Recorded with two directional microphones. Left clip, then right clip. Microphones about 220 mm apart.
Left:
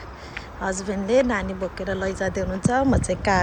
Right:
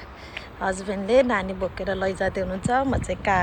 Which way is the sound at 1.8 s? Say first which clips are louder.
Right 1 dB; 5° left (ahead or behind).